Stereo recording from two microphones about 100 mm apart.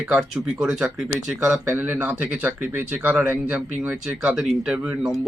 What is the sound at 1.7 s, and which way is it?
Speech, 20° right (ahead or behind).